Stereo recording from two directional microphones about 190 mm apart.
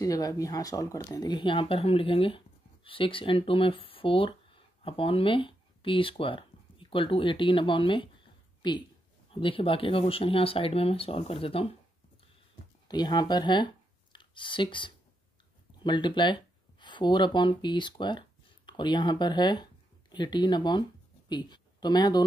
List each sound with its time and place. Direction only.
0.0 s speech: 20° left (ahead or behind)
12.8 s speech: 20° left (ahead or behind)